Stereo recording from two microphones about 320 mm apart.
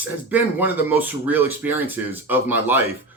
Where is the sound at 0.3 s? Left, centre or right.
Centre.